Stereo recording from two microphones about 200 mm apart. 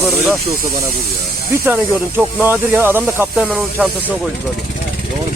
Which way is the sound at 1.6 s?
10° right (ahead or behind).